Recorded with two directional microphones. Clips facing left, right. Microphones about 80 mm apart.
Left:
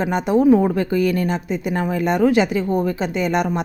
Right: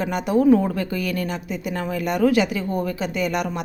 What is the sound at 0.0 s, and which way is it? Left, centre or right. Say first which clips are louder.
Speech: left 3 dB; left.